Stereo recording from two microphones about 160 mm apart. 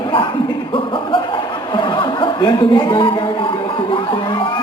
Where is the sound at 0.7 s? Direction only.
30° left (ahead or behind).